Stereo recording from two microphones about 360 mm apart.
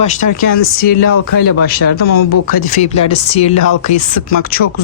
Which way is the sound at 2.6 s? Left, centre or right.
Centre.